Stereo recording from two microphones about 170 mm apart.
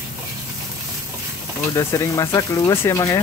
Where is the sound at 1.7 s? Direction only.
20° left (ahead or behind).